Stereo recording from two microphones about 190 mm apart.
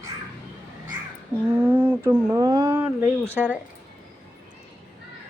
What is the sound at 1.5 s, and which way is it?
Speech, 10° right (ahead or behind).